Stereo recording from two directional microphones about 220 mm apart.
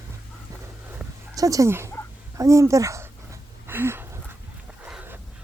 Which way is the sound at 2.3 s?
15° right (ahead or behind).